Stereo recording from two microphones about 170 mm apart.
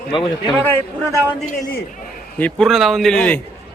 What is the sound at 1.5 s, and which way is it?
Speech, 50° left (ahead or behind).